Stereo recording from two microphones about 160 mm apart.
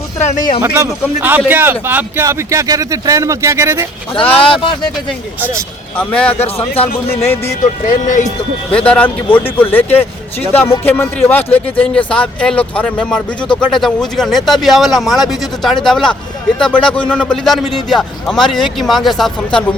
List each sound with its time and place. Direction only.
0.2 s speech: 50° left (ahead or behind)
0.6 s a man's voice: 15° right (ahead or behind)
4.1 s speech: 35° left (ahead or behind)
6.0 s speech: 10° left (ahead or behind)
6.8 s speech: 40° left (ahead or behind)
7.1 s speech: 15° left (ahead or behind)
8.0 s speech: 50° left (ahead or behind)
8.9 s a man's voice: 10° left (ahead or behind)